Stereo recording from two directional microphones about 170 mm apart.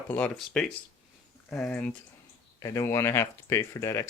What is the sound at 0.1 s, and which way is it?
Speech, 5° left (ahead or behind).